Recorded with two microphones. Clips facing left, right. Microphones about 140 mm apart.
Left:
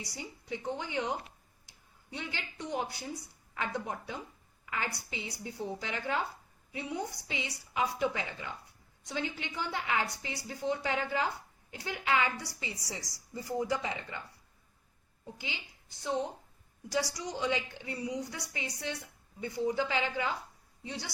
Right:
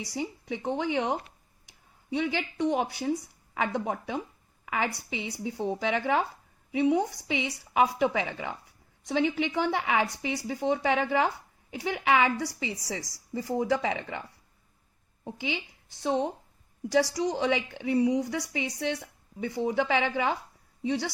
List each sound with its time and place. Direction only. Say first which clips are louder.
0.2 s a woman's voice: right 8 dB; 90° right
15.2 s a woman's voice: right 10 dB; 90° right
16.9 s a woman's voice: right 9 dB; 90° right